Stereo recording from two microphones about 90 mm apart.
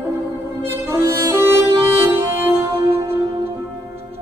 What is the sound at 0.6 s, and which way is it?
Music, 25° right (ahead or behind).